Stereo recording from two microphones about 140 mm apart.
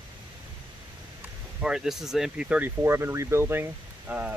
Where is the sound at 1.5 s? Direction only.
5° right (ahead or behind).